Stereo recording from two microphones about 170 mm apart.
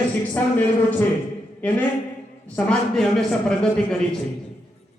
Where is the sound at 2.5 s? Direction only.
5° left (ahead or behind).